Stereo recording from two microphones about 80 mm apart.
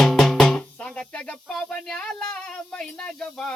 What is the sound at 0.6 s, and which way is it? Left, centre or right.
Speech, centre.